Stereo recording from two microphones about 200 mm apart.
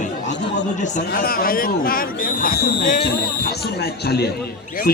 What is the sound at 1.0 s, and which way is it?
Speech, 50° left (ahead or behind).